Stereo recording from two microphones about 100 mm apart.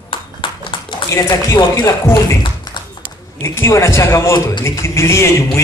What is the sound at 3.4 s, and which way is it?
A man's voice, 25° left (ahead or behind).